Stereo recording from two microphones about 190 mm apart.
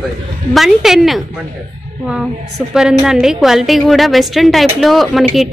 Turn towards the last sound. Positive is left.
turn(degrees=0)  # may be behind; listen again after turning